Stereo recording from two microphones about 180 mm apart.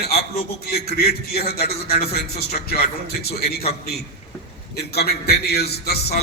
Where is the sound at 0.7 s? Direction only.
60° left (ahead or behind).